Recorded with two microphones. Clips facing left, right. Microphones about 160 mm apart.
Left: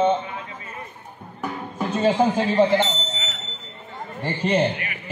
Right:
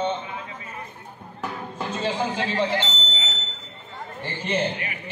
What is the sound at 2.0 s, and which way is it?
Speech, 45° left (ahead or behind).